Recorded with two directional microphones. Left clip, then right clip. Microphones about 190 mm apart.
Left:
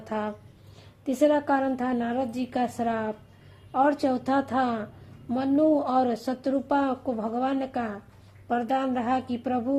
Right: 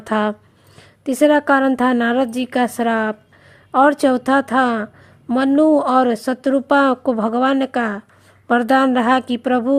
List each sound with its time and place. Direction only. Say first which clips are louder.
0.0 s speech: right 12 dB; 45° right (ahead or behind)
1.0 s speech: right 9 dB; 35° right (ahead or behind)